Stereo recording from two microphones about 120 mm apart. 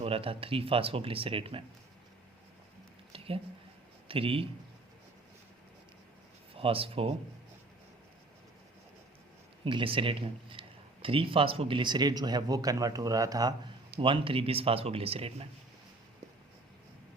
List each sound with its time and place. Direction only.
0.0 s speech: 50° right (ahead or behind)
3.1 s a sound: 50° right (ahead or behind)
4.1 s speech: 50° right (ahead or behind)
6.5 s speech: 50° right (ahead or behind)
9.6 s speech: 45° right (ahead or behind); by 13.5 s 30° right (ahead or behind)
14.0 s speech: 45° right (ahead or behind)